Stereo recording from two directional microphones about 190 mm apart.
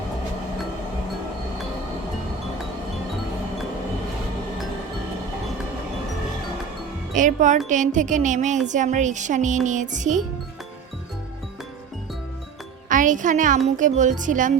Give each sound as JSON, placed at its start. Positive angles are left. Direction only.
{"t": 7.2, "sound": "speech", "side_deg": -40}
{"t": 12.9, "sound": "a child's voice", "side_deg": -40}